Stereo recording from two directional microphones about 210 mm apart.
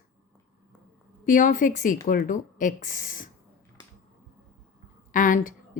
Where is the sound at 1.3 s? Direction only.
40° left (ahead or behind).